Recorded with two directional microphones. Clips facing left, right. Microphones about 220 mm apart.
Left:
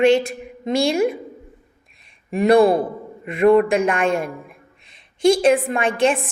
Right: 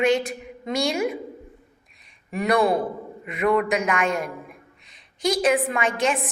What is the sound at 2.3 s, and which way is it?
A woman's voice, 30° left (ahead or behind).